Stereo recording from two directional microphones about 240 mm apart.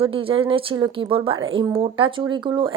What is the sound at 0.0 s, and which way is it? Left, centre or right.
A woman's voice, right.